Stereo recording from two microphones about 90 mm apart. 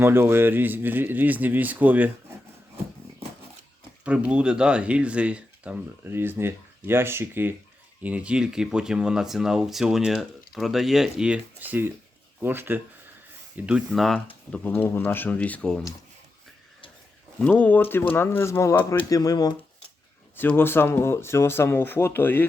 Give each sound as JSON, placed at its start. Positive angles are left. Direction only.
{"t": 0.0, "sound": "speech", "side_deg": -25}
{"t": 4.0, "sound": "speech", "side_deg": -15}
{"t": 6.1, "sound": "speech", "side_deg": -25}
{"t": 8.0, "sound": "speech", "side_deg": -15}
{"t": 11.6, "sound": "speech", "side_deg": -20}
{"t": 13.9, "sound": "speech", "side_deg": 0}
{"t": 14.5, "sound": "speech", "side_deg": 20}
{"t": 17.4, "sound": "speech", "side_deg": 20}
{"t": 20.3, "sound": "speech", "side_deg": 20}